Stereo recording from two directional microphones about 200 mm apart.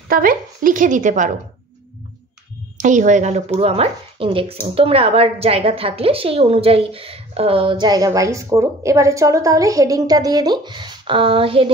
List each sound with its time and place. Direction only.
0.1 s a woman's voice: 45° right (ahead or behind)
2.8 s speech: 40° right (ahead or behind)